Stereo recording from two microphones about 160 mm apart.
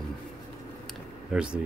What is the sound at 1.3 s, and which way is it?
Speech, 5° right (ahead or behind).